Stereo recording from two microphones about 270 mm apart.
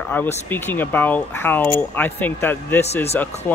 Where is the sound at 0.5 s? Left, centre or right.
Centre.